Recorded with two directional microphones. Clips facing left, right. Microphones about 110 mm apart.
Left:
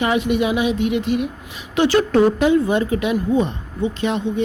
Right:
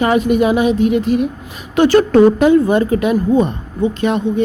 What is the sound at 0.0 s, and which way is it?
Speech, 45° right (ahead or behind).